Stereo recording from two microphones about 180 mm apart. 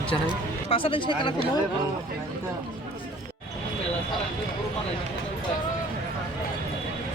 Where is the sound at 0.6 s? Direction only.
30° left (ahead or behind).